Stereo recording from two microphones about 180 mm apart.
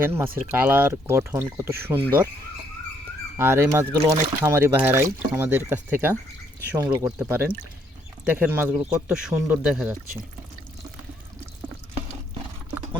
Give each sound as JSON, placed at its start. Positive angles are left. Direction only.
{"t": 0.0, "sound": "speech", "side_deg": -15}
{"t": 3.3, "sound": "speech", "side_deg": -15}